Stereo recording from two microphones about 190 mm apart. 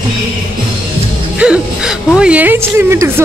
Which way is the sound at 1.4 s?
5° right (ahead or behind).